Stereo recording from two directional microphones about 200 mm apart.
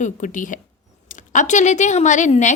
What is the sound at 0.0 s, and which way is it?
A woman's voice, 40° left (ahead or behind).